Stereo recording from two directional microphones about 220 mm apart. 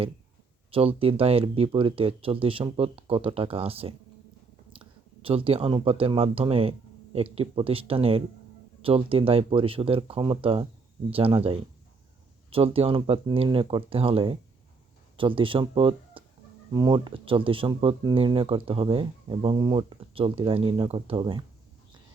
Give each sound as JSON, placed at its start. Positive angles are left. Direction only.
{"t": 0.7, "sound": "speech", "side_deg": -25}